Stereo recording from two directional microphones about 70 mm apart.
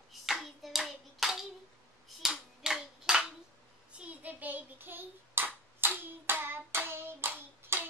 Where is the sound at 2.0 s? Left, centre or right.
Centre.